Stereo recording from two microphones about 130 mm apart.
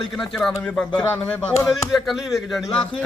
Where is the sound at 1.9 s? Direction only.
Centre (ahead or behind).